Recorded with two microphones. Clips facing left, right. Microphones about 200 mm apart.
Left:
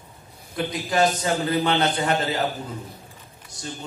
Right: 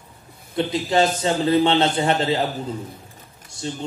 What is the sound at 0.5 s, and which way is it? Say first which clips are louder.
A man's voice: right 4 dB; 25° right (ahead or behind).